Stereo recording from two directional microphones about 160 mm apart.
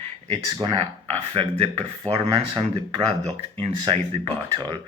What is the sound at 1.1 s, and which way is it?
Speech, 40° right (ahead or behind).